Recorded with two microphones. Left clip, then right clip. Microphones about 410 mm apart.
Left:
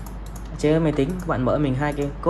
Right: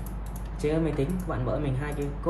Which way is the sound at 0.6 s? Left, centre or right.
Centre.